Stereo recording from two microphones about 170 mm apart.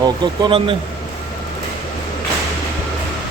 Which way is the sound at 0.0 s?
30° right (ahead or behind).